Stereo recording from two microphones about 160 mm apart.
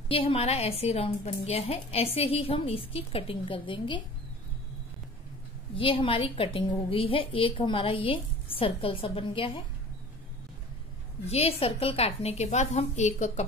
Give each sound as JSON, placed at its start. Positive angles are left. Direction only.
{"t": 0.1, "sound": "a woman's voice", "side_deg": 35}
{"t": 5.8, "sound": "a woman's voice", "side_deg": 35}
{"t": 11.2, "sound": "a woman's voice", "side_deg": 40}